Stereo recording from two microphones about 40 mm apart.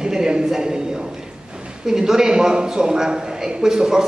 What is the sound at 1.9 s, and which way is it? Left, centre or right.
A man's voice, centre.